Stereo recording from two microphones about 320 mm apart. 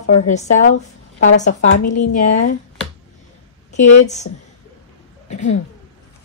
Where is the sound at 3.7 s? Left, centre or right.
Left.